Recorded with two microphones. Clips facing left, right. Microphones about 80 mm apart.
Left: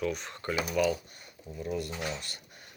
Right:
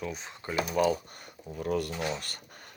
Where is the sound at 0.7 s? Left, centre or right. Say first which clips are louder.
Right 3 dB; right.